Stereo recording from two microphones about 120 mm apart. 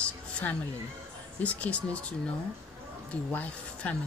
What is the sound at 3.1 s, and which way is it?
Speech, 10° left (ahead or behind).